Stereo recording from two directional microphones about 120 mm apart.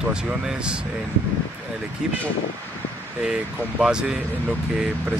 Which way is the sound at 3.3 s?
5° right (ahead or behind).